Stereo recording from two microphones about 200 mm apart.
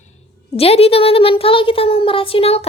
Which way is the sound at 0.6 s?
30° left (ahead or behind).